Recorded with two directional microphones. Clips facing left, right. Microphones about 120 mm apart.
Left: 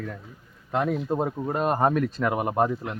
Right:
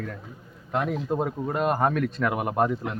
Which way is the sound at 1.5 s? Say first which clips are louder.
Left 1 dB; 30° left (ahead or behind).